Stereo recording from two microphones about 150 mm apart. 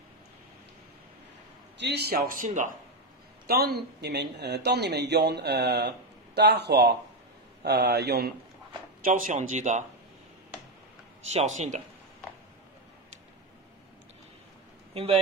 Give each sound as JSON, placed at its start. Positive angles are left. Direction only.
{"t": 1.9, "sound": "speech", "side_deg": -90}
{"t": 3.4, "sound": "speech", "side_deg": -90}
{"t": 9.0, "sound": "speech", "side_deg": -65}
{"t": 11.3, "sound": "speech", "side_deg": -50}